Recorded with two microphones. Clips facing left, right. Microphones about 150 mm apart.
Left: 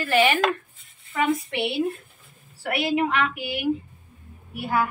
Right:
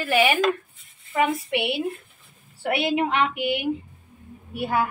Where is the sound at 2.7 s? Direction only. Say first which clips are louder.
Even; 25° right (ahead or behind).